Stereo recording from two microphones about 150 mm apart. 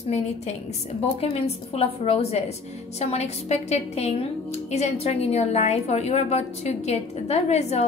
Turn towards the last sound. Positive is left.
turn(degrees=45)  # may be behind; listen again after turning